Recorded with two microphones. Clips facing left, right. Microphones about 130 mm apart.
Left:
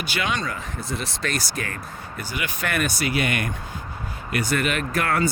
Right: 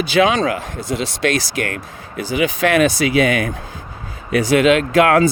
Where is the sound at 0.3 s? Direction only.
90° right.